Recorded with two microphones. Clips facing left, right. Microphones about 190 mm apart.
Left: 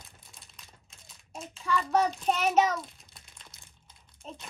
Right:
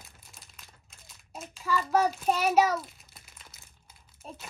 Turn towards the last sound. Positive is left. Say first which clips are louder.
# left 1 dB
turn(degrees=-5)  # may be behind; listen again after turning